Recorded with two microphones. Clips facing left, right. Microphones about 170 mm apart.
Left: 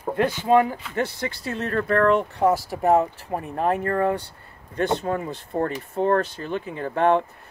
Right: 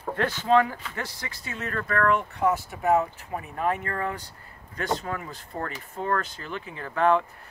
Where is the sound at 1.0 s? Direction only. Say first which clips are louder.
Left 14 dB; 30° left (ahead or behind).